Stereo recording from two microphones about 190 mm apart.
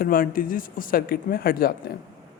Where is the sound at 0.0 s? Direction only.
50° left (ahead or behind).